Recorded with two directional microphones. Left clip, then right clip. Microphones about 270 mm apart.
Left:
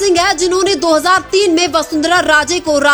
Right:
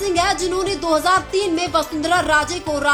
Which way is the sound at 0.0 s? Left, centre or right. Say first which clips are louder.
Left 7 dB; left.